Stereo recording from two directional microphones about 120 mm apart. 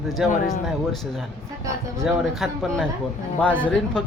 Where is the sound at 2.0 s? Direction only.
Centre (ahead or behind).